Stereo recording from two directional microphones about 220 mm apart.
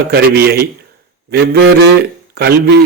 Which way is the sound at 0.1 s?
45° right (ahead or behind).